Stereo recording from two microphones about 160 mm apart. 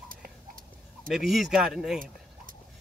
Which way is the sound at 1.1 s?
Centre (ahead or behind).